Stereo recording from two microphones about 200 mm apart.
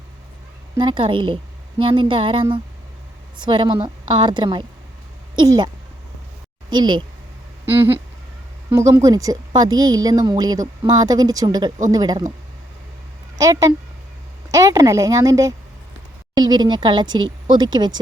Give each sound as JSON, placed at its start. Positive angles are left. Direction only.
{"t": 0.8, "sound": "speech", "side_deg": -25}
{"t": 7.6, "sound": "a sound", "side_deg": -10}
{"t": 8.7, "sound": "a woman's voice", "side_deg": -15}
{"t": 13.4, "sound": "a woman's voice", "side_deg": -15}